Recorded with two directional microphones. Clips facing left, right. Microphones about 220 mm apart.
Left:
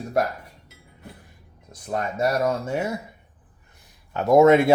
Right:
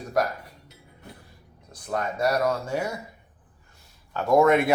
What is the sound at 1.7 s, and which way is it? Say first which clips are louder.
Speech: left 1 dB; 25° left (ahead or behind).